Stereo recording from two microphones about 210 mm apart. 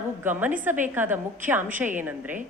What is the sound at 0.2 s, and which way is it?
Speech, 10° right (ahead or behind).